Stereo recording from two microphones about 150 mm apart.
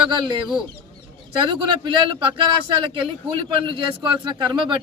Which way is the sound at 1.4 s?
30° right (ahead or behind).